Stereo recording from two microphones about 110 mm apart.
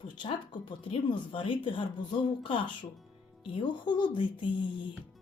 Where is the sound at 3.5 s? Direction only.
45° left (ahead or behind).